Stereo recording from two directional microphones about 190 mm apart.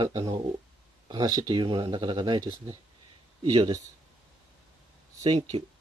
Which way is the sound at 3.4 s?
20° right (ahead or behind).